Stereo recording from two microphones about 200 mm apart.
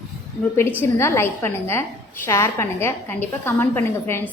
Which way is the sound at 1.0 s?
10° left (ahead or behind).